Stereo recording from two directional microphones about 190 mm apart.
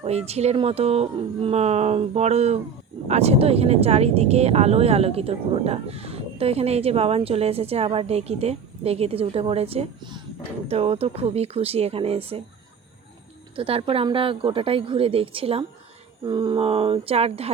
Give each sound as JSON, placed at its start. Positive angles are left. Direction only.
{"t": 0.0, "sound": "speech", "side_deg": -35}
{"t": 13.6, "sound": "a woman's voice", "side_deg": -30}